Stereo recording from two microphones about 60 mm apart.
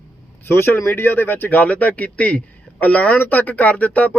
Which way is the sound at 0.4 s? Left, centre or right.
Left.